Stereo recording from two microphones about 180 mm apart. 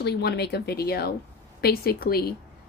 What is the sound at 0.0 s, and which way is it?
A woman's voice, 65° left (ahead or behind).